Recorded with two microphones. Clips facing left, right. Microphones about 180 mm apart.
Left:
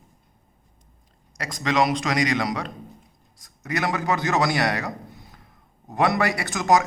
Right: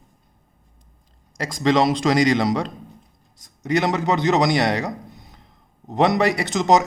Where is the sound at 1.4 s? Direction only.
30° right (ahead or behind).